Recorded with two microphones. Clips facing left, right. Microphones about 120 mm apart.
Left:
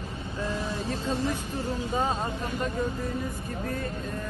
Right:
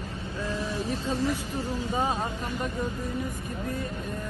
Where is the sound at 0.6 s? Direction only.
60° left (ahead or behind).